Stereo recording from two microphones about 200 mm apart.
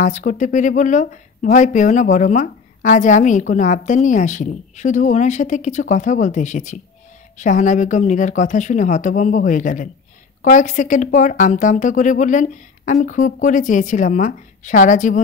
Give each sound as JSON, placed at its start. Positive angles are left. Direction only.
{"t": 0.0, "sound": "speech", "side_deg": 40}